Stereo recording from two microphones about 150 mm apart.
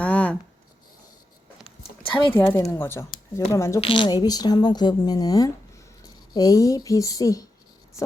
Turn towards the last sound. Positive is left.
turn(degrees=25)  # may be behind; listen again after turning